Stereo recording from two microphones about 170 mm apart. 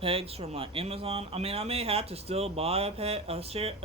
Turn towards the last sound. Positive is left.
turn(degrees=-35)  # may be behind; listen again after turning